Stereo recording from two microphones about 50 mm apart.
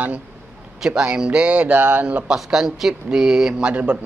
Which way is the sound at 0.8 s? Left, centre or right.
Centre.